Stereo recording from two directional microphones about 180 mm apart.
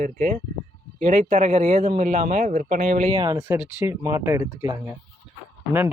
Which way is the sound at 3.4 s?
10° right (ahead or behind).